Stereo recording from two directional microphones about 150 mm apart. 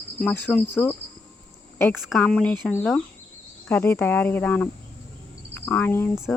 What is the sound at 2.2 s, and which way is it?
Speech, 10° left (ahead or behind).